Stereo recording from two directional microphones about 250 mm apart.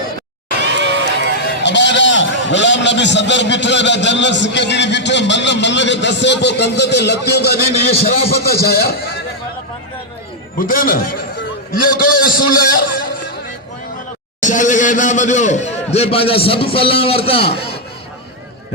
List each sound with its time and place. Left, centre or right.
0.6 s run: right
1.6 s a man's voice: left
10.6 s a man's voice: left
14.4 s a man's voice: left